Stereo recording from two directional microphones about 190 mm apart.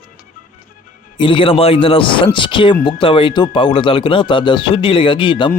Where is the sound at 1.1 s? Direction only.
25° left (ahead or behind).